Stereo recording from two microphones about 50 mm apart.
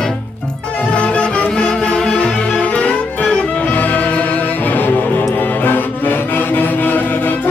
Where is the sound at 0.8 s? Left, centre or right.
Left.